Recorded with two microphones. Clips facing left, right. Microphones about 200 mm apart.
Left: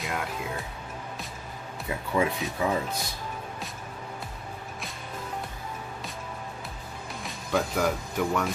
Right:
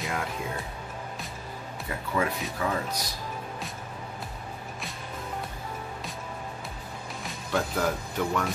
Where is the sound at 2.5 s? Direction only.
15° left (ahead or behind).